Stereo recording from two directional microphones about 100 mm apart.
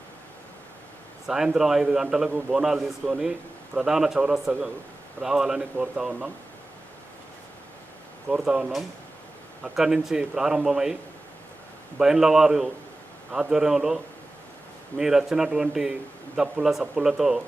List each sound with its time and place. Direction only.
1.3 s speech: 5° right (ahead or behind)
8.3 s speech: 10° right (ahead or behind)
11.9 s speech: 5° right (ahead or behind)